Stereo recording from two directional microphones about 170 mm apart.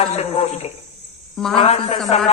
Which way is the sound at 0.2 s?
40° left (ahead or behind).